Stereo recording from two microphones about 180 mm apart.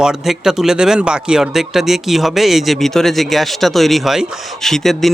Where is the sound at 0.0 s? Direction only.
5° right (ahead or behind).